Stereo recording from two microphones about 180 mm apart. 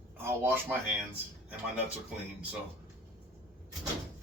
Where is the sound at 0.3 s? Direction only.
10° right (ahead or behind).